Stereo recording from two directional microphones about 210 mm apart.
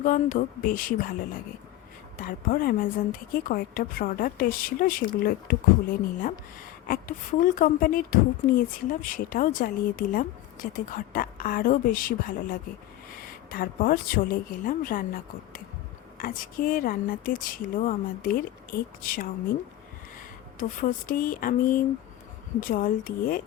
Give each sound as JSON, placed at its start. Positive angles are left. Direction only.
{"t": 0.0, "sound": "a woman's voice", "side_deg": 40}
{"t": 2.2, "sound": "a woman's voice", "side_deg": 45}
{"t": 20.6, "sound": "a woman's voice", "side_deg": 40}